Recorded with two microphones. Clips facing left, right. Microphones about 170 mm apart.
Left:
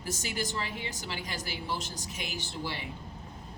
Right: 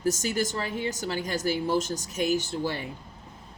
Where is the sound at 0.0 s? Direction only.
45° right (ahead or behind).